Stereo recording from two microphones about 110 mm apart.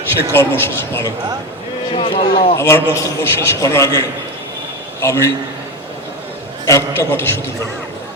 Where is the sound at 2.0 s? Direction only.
60° left (ahead or behind).